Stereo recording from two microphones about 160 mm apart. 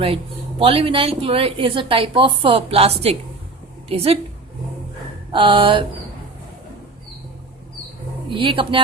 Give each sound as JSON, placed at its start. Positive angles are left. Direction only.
{"t": 0.6, "sound": "a woman's voice", "side_deg": -35}
{"t": 5.3, "sound": "a woman's voice", "side_deg": -30}
{"t": 8.3, "sound": "a woman's voice", "side_deg": -35}